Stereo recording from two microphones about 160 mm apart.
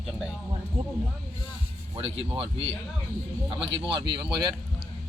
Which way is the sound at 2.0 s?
35° right (ahead or behind).